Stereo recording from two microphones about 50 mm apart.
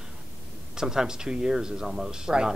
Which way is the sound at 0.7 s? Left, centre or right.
Centre.